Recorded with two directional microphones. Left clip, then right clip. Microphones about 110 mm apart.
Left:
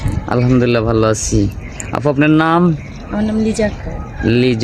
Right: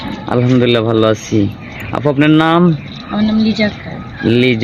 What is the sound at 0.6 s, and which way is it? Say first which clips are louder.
Speech: right 3 dB; 30° left (ahead or behind).